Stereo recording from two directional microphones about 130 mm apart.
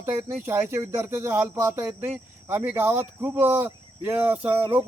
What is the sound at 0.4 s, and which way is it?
Speech, 20° right (ahead or behind).